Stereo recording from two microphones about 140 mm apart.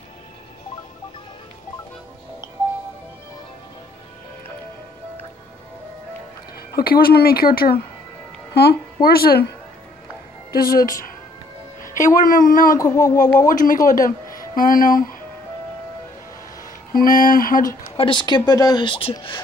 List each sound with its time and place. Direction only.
6.7 s speech: 90° left
10.5 s a woman's voice: 90° left
11.8 s a woman's voice: 70° left (ahead or behind)
12.7 s a sound: 25° left (ahead or behind)
13.5 s speech: 75° left (ahead or behind)
14.3 s speech: 85° left
16.9 s speech: 80° left
17.9 s a woman's voice: 35° left (ahead or behind)